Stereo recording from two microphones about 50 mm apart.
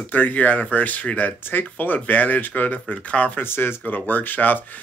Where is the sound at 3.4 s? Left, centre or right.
Left.